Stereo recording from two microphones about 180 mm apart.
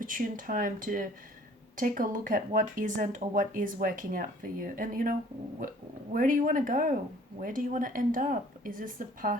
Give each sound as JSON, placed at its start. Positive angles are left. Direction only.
{"t": 0.0, "sound": "speech", "side_deg": -50}
{"t": 6.1, "sound": "speech", "side_deg": -50}